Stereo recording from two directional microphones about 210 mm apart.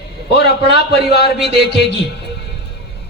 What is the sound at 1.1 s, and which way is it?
Speech, 50° left (ahead or behind).